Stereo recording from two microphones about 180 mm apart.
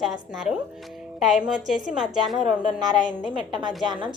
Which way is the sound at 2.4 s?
45° left (ahead or behind).